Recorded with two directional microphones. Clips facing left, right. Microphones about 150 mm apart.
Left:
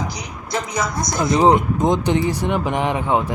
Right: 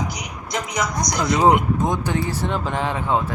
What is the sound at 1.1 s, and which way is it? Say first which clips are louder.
Speech: left 2 dB; 20° left (ahead or behind).